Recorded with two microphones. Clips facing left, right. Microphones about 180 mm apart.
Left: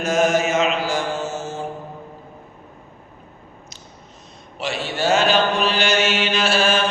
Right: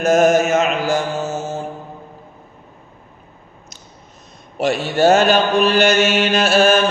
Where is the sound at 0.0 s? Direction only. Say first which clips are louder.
Right 5 dB; 45° right (ahead or behind).